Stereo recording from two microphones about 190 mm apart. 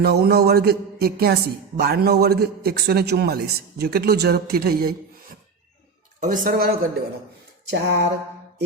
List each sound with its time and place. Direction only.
0.0 s speech: 55° right (ahead or behind)
6.1 s a woman's voice: 40° right (ahead or behind); by 8.0 s 60° right (ahead or behind)